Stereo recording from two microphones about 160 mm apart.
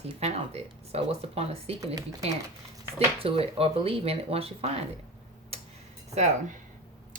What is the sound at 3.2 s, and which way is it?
Speech, 35° right (ahead or behind).